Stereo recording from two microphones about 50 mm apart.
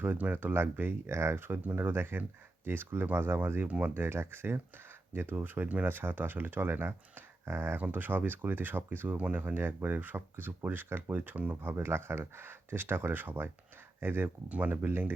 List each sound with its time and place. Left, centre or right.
0.2 s speech: right
0.4 s speech: right
1.0 s speech: right
3.9 s speech: right
7.8 s speech: right
9.1 s speech: right
9.6 s speech: right
11.6 s speech: right
14.5 s speech: right